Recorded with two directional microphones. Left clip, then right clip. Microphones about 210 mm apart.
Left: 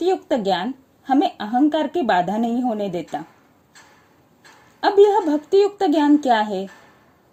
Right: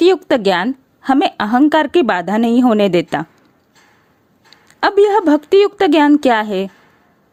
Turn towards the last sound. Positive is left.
turn(degrees=-30)  # may be behind; listen again after turning